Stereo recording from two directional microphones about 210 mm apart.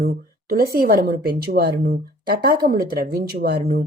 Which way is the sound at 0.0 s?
45° right (ahead or behind).